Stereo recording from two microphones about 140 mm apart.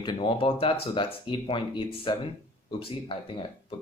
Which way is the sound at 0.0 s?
35° left (ahead or behind).